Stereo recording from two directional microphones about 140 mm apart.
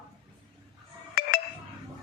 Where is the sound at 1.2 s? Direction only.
90° left.